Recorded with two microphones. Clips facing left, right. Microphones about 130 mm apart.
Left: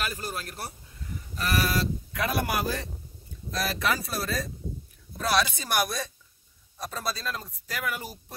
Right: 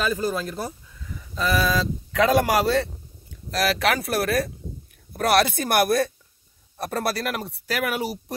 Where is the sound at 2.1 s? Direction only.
90° right.